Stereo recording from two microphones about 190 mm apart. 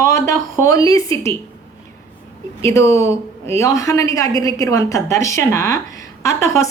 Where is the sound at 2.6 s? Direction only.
15° left (ahead or behind).